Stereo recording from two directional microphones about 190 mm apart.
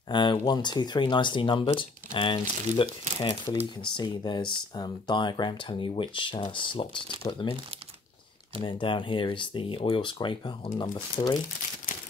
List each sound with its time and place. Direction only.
0.1 s speech: 25° left (ahead or behind)
8.6 s speech: 25° left (ahead or behind)